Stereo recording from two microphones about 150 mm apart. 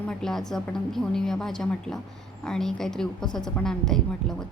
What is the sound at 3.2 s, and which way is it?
Speech, 30° left (ahead or behind).